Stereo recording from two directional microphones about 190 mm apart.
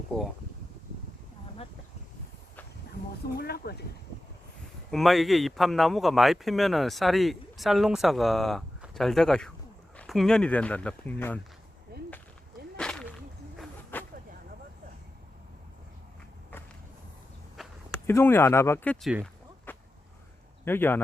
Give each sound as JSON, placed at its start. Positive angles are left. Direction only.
{"t": 0.1, "sound": "speech", "side_deg": 5}
{"t": 3.3, "sound": "speech", "side_deg": 55}
{"t": 4.9, "sound": "speech", "side_deg": 0}
{"t": 12.7, "sound": "whip", "side_deg": 5}
{"t": 13.9, "sound": "a sound", "side_deg": 10}
{"t": 17.6, "sound": "walk", "side_deg": 0}
{"t": 18.0, "sound": "speech", "side_deg": 10}
{"t": 19.0, "sound": "speech", "side_deg": 0}
{"t": 19.7, "sound": "a sound", "side_deg": 10}
{"t": 20.7, "sound": "speech", "side_deg": 10}